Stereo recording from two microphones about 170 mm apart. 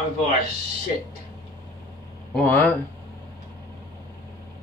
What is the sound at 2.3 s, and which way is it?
Speech, 10° left (ahead or behind).